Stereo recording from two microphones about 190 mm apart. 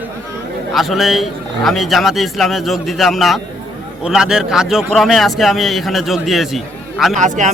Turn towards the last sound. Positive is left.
turn(degrees=-40)  # may be behind; listen again after turning